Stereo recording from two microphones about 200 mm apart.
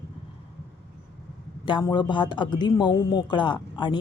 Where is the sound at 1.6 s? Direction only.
20° left (ahead or behind).